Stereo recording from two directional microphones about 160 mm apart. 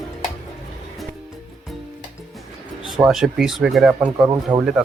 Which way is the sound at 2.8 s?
Centre (ahead or behind).